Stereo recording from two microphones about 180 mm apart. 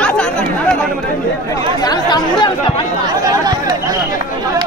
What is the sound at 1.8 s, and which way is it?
Speech, 20° left (ahead or behind).